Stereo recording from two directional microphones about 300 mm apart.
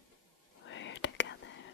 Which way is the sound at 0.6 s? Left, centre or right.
Left.